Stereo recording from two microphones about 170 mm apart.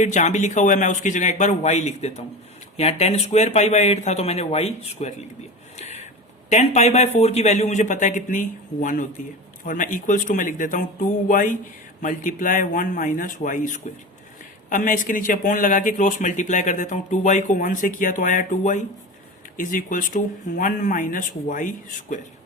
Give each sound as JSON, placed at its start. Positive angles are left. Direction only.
{"t": 0.0, "sound": "speech", "side_deg": 45}
{"t": 5.7, "sound": "a sound", "side_deg": 40}
{"t": 6.5, "sound": "speech", "side_deg": 40}